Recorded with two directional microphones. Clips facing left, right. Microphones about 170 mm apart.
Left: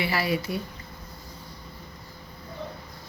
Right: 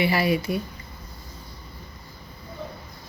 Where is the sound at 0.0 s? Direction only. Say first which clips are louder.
Right 4 dB; 15° right (ahead or behind).